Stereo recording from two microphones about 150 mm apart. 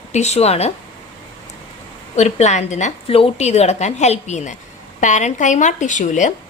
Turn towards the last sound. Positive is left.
turn(degrees=55)  # may be behind; listen again after turning